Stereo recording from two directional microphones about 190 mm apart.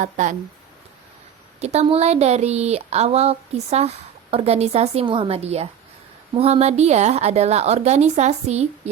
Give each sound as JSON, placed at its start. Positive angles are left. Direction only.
{"t": 0.0, "sound": "speech", "side_deg": -40}
{"t": 1.5, "sound": "speech", "side_deg": -35}